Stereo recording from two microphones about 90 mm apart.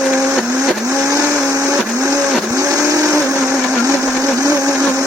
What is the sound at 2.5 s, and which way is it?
Blender, 40° right (ahead or behind).